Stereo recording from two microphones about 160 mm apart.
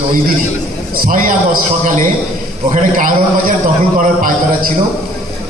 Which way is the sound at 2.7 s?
55° right (ahead or behind).